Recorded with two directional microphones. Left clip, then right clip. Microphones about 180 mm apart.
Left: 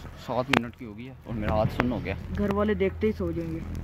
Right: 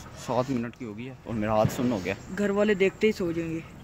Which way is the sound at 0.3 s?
5° right (ahead or behind).